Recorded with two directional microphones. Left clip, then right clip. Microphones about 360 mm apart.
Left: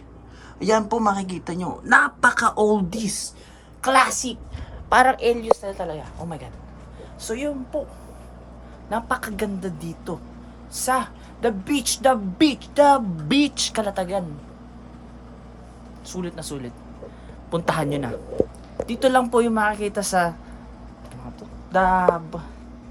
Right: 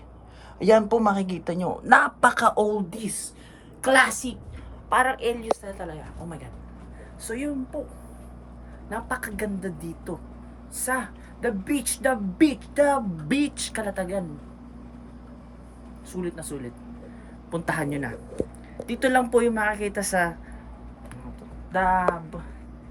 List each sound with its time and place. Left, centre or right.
0.6 s a woman's voice: centre
3.8 s a woman's voice: centre
4.9 s a woman's voice: left
8.9 s a woman's voice: centre
16.2 s a woman's voice: centre
21.7 s a woman's voice: centre